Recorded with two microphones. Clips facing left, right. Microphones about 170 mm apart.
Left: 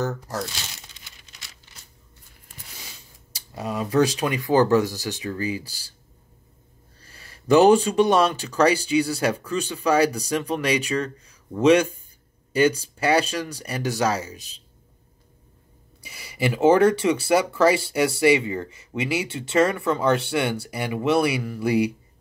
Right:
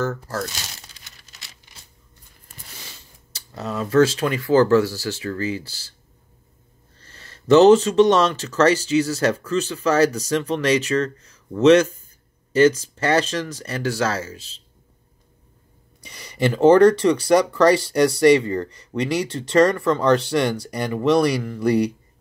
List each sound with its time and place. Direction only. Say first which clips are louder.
0.0 s speech: right 2 dB; 15° left (ahead or behind)
1.7 s a sound: right 1 dB; 15° right (ahead or behind)
3.3 s speech: right 1 dB; 15° left (ahead or behind)
7.0 s speech: right 2 dB; 10° left (ahead or behind)
16.0 s speech: right 4 dB; 5° left (ahead or behind)